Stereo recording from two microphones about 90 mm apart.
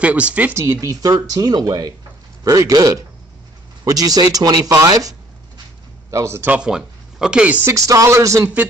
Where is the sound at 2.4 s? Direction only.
40° right (ahead or behind).